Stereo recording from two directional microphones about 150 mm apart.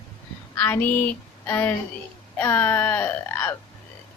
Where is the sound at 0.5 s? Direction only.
10° left (ahead or behind).